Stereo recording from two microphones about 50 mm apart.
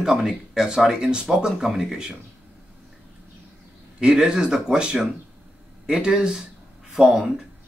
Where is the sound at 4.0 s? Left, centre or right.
Centre.